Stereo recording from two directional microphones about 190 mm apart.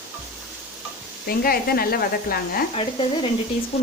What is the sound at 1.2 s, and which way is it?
Speech, 50° left (ahead or behind).